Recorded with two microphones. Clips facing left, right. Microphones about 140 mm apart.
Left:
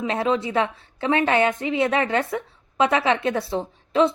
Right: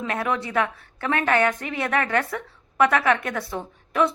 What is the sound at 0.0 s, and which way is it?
A woman's voice, 20° left (ahead or behind).